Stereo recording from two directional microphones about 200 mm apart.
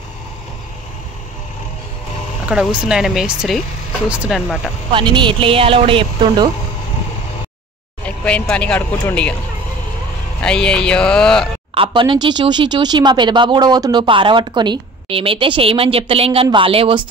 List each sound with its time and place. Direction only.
2.4 s speech: 5° right (ahead or behind)
4.9 s speech: 25° right (ahead or behind)
8.3 s speech: 5° left (ahead or behind)
10.4 s speech: 5° left (ahead or behind)
11.7 s speech: 25° right (ahead or behind)